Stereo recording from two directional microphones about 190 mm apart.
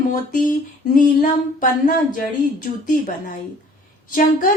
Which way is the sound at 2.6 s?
45° left (ahead or behind).